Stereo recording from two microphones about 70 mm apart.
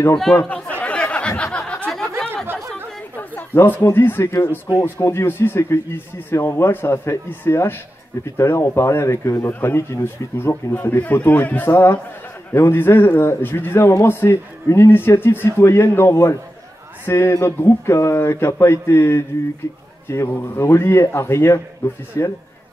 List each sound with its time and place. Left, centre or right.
0.4 s a sound: centre
3.5 s a man's voice: left
5.2 s a man's voice: left
11.7 s a man's voice: left